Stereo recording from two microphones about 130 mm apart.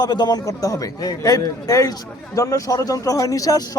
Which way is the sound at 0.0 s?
30° left (ahead or behind).